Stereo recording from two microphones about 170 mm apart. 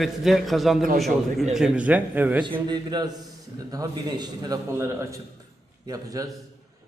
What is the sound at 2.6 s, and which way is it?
A man's voice, 25° right (ahead or behind).